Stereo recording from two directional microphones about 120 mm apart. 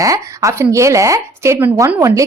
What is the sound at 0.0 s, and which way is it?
A woman's voice, 25° right (ahead or behind).